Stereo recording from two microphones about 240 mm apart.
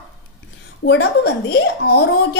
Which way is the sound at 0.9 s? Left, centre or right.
Left.